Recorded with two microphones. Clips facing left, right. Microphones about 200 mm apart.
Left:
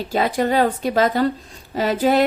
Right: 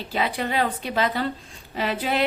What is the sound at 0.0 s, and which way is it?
A woman's voice, 45° left (ahead or behind).